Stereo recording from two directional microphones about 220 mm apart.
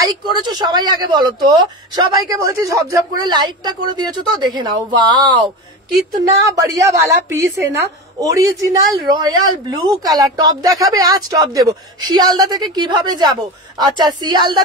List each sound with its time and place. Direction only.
0.1 s a woman's voice: 20° right (ahead or behind)